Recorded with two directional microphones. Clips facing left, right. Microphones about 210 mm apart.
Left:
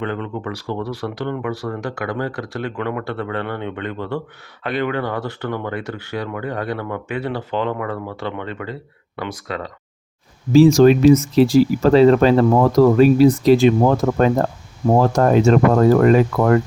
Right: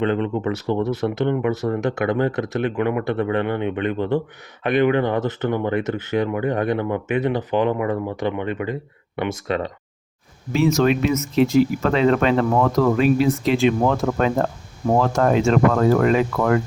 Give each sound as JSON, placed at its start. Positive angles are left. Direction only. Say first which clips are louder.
{"t": 0.0, "sound": "speech", "louder": "right 4 dB", "side_deg": -20}
{"t": 10.8, "sound": "speech", "louder": "left 8 dB", "side_deg": 30}